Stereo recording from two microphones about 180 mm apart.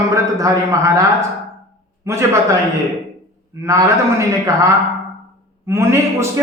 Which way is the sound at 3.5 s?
15° right (ahead or behind).